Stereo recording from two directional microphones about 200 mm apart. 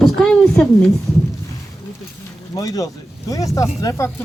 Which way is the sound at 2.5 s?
15° left (ahead or behind).